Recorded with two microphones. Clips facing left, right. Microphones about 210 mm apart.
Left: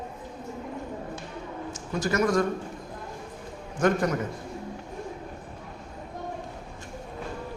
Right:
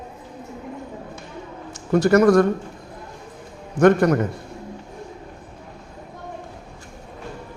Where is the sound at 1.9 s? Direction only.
65° right (ahead or behind).